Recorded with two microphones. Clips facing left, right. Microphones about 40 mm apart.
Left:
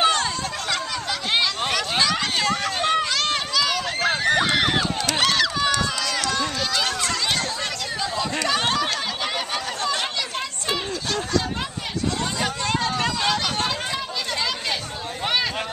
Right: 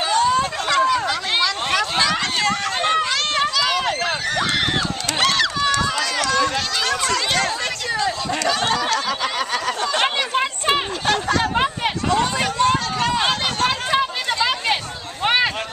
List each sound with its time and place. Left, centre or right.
0.7 s chatter: centre
1.7 s a sound: centre
4.3 s run: centre
8.0 s chatter: centre
10.3 s a sound: right
13.1 s chatter: right